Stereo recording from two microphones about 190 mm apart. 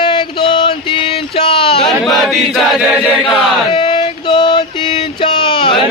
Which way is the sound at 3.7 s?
25° left (ahead or behind).